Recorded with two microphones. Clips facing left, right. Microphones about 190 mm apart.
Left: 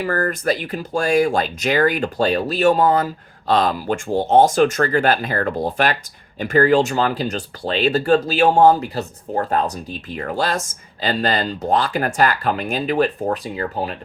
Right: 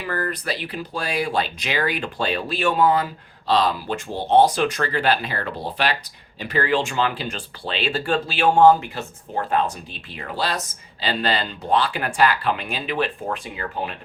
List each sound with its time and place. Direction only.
0.0 s speech: 45° left (ahead or behind)